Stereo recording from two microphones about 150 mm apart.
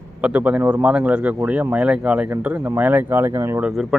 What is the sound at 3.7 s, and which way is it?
Speech, centre (ahead or behind).